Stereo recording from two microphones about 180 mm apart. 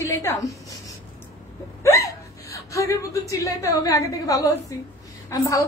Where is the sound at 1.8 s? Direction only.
20° left (ahead or behind).